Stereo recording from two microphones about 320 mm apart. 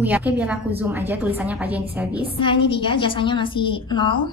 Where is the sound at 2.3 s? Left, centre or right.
Centre.